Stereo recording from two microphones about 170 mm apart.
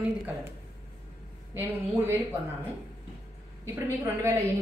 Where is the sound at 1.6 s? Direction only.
10° right (ahead or behind).